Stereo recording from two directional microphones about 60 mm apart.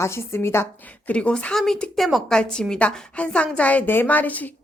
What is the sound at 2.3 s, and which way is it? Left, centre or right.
A woman's voice, centre.